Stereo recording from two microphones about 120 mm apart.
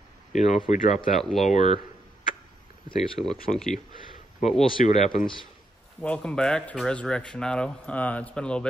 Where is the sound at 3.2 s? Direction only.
5° left (ahead or behind).